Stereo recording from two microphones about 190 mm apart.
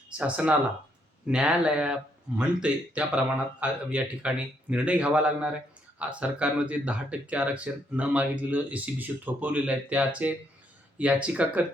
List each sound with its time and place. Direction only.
0.1 s speech: 5° right (ahead or behind)